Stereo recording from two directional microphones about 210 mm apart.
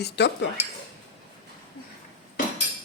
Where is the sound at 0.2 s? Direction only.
50° left (ahead or behind).